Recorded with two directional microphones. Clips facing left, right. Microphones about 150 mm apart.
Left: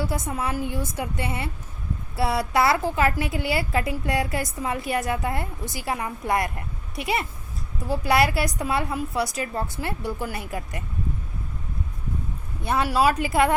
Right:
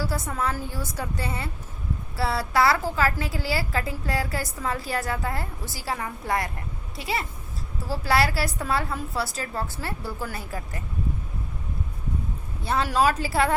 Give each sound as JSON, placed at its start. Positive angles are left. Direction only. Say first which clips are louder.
{"t": 0.0, "sound": "a woman's voice", "louder": "left 1 dB", "side_deg": 20}
{"t": 7.9, "sound": "a woman's voice", "louder": "left 2 dB", "side_deg": 20}
{"t": 12.6, "sound": "a woman's voice", "louder": "left 1 dB", "side_deg": 10}